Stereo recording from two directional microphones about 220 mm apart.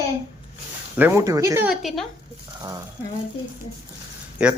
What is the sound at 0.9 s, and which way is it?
Speech, 10° right (ahead or behind).